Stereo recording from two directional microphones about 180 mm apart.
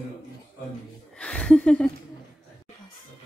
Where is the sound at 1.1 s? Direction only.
5° left (ahead or behind).